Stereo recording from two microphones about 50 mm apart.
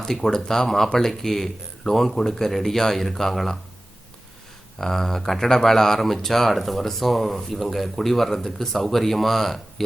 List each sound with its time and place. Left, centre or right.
0.0 s speech: centre
4.8 s speech: centre